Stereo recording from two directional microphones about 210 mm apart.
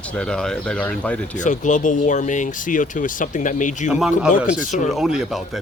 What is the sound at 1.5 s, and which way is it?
Speech, 35° left (ahead or behind).